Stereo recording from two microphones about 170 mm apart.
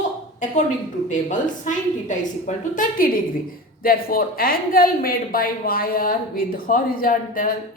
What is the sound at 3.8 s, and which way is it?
A woman's voice, 60° left (ahead or behind).